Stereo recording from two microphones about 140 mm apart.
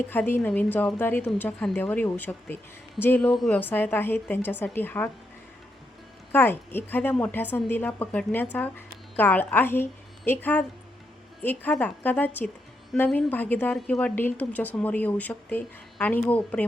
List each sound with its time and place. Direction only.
0.0 s speech: 15° left (ahead or behind)
6.3 s a woman's voice: 15° left (ahead or behind)